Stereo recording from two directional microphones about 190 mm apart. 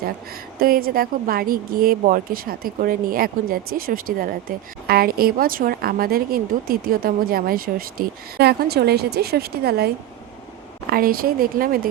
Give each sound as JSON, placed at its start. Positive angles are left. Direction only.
{"t": 0.6, "sound": "speech", "side_deg": -50}